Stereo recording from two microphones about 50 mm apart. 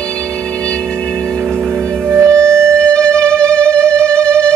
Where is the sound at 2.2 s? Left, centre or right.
Right.